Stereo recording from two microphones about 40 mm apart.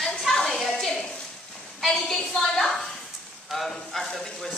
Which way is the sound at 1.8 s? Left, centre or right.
Centre.